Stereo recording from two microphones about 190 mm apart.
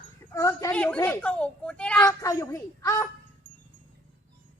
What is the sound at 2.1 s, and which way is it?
A child's voice, 15° left (ahead or behind).